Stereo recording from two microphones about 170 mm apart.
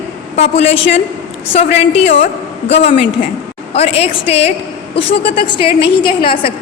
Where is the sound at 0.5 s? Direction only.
35° left (ahead or behind).